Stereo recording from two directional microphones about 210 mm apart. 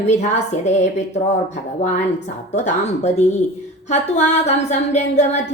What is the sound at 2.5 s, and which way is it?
A woman's voice, 35° left (ahead or behind).